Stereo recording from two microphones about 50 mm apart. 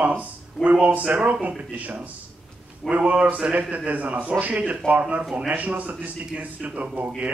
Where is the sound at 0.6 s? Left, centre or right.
Centre.